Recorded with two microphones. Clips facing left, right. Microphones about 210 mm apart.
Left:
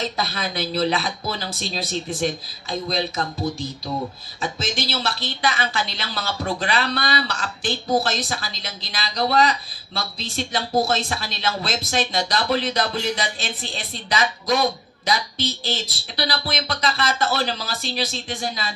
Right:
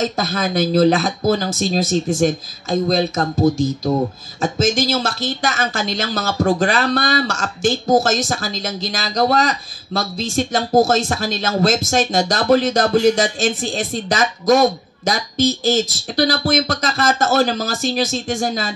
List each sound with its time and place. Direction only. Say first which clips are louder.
0.0 s speech: right 6 dB; 45° right (ahead or behind)